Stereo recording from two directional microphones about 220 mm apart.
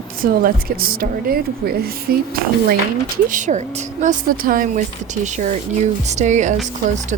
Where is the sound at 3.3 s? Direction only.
35° right (ahead or behind).